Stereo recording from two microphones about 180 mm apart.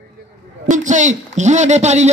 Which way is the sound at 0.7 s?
45° right (ahead or behind).